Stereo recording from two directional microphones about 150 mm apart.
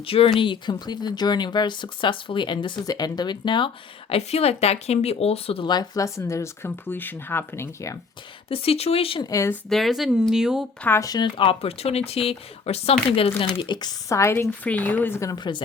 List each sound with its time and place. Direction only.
0.0 s speech: 40° left (ahead or behind)
4.1 s speech: 45° left (ahead or behind); by 7.9 s 20° left (ahead or behind)
8.4 s speech: 40° left (ahead or behind)
9.3 s speech: 20° left (ahead or behind)
9.6 s speech: centre (ahead or behind)
10.8 s speech: 20° left (ahead or behind)